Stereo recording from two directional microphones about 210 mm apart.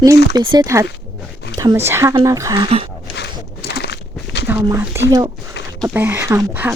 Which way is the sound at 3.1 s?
50° left (ahead or behind).